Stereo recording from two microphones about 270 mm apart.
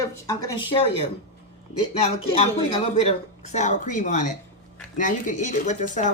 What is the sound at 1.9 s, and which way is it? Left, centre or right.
Speech, left.